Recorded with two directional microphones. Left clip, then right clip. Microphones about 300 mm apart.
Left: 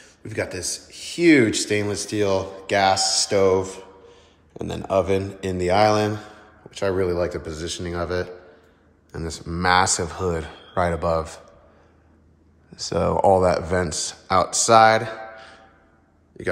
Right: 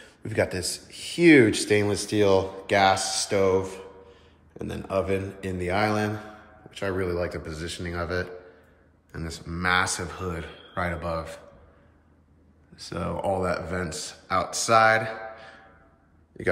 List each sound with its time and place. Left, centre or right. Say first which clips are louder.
0.0 s speech: right 2 dB; centre
12.7 s a man's voice: left 10 dB; centre